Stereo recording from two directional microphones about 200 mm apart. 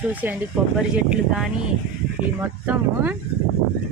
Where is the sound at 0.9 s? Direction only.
5° right (ahead or behind).